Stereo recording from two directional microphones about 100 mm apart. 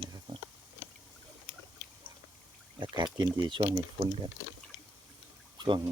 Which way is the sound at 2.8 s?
50° right (ahead or behind).